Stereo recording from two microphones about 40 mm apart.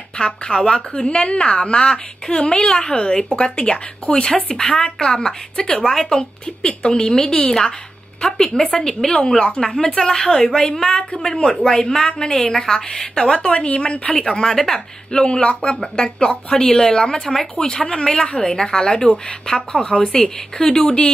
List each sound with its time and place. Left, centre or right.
0.2 s a woman's voice: centre
6.6 s a woman's voice: left; by 14.8 s centre
15.1 s a woman's voice: left